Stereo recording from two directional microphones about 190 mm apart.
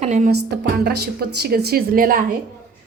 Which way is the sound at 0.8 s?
55° right (ahead or behind).